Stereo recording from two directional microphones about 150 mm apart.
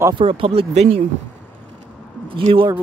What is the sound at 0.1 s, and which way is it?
Speech, 35° right (ahead or behind).